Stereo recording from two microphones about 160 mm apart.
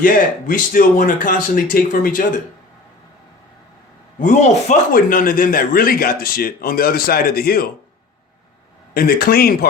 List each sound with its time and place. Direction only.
0.0 s speech: 60° left (ahead or behind)
4.2 s a man's voice: 50° left (ahead or behind)
4.9 s a man's voice: 65° left (ahead or behind)
9.0 s a man's voice: 70° left (ahead or behind)